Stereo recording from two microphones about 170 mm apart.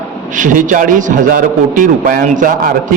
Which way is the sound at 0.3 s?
50° right (ahead or behind).